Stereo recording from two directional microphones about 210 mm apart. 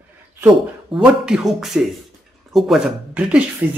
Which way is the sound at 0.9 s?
5° right (ahead or behind).